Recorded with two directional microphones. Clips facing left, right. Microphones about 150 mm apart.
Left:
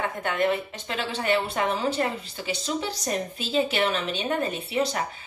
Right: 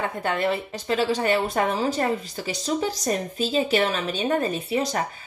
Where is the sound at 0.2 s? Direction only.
35° right (ahead or behind).